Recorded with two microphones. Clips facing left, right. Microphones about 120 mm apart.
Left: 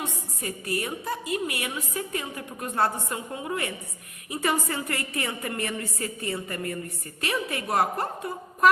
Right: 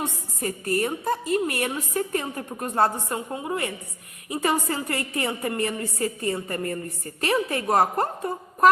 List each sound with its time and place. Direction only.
0.4 s a woman's voice: 45° right (ahead or behind)